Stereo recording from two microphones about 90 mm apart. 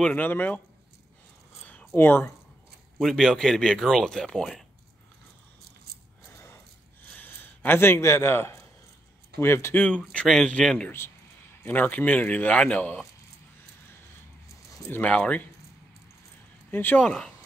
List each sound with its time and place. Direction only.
0.0 s speech: 20° left (ahead or behind)
1.6 s a sound: 15° left (ahead or behind)
2.0 s speech: 25° left (ahead or behind)
3.0 s speech: 5° left (ahead or behind)
7.1 s speech: 20° left (ahead or behind)
9.8 s a man's voice: 10° left (ahead or behind)
14.9 s a man's voice: 15° left (ahead or behind)
16.7 s speech: 20° left (ahead or behind)